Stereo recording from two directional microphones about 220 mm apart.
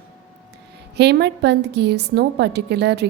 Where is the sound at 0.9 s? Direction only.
50° right (ahead or behind).